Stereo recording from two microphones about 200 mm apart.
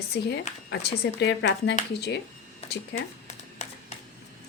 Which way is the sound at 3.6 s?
35° left (ahead or behind).